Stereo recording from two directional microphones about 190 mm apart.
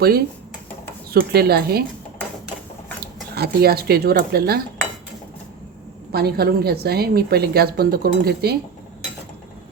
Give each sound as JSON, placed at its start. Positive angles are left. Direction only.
{"t": 1.1, "sound": "a woman's voice", "side_deg": -55}
{"t": 3.3, "sound": "a woman's voice", "side_deg": -55}
{"t": 6.1, "sound": "a woman's voice", "side_deg": -55}